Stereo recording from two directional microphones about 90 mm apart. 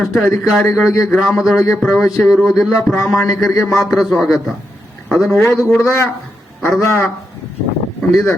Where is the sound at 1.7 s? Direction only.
5° left (ahead or behind).